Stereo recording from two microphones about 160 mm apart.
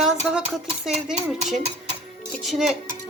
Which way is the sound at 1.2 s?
45° right (ahead or behind).